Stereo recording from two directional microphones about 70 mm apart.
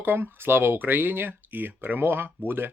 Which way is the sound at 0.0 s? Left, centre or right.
Right.